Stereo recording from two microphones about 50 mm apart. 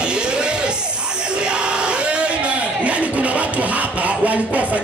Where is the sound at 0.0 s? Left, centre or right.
Centre.